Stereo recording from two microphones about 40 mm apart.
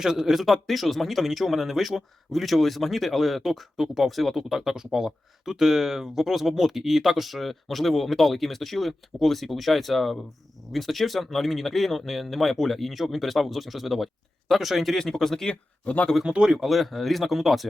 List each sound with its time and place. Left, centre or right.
0.0 s speech: centre
14.9 s speech: centre
15.4 s speech: left
16.2 s speech: right
16.6 s speech: centre